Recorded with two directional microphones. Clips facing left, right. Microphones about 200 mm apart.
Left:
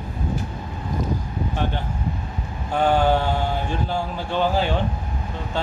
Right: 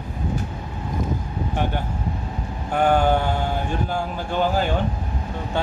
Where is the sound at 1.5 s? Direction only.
15° right (ahead or behind).